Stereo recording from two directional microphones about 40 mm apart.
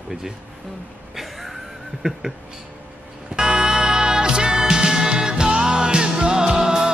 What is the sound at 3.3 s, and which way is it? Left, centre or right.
Music, centre.